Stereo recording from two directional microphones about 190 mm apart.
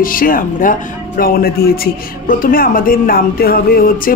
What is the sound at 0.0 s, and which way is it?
Speech, 45° left (ahead or behind).